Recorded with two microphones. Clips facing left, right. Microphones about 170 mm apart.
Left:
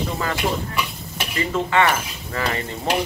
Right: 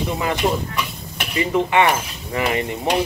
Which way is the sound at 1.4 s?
20° right (ahead or behind).